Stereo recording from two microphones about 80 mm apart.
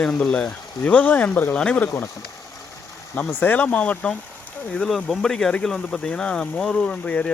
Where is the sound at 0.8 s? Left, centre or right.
Centre.